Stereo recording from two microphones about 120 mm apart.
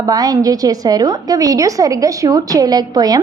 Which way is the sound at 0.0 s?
30° right (ahead or behind).